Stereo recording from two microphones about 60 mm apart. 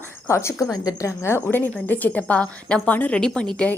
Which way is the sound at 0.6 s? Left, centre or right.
Left.